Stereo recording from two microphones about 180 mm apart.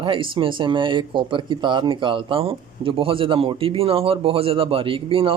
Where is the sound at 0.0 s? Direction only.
30° right (ahead or behind).